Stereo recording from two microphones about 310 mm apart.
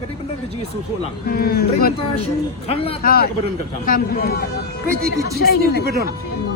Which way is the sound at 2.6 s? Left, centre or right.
Centre.